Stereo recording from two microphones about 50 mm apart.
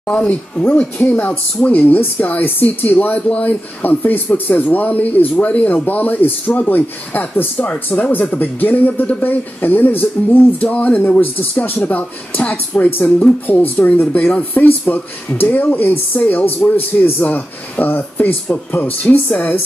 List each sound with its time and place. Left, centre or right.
0.0 s speech: left
1.2 s speech: left
3.2 s speech: left
7.5 s speech: left